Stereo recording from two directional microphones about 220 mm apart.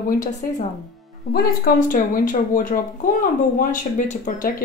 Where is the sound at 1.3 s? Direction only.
40° left (ahead or behind).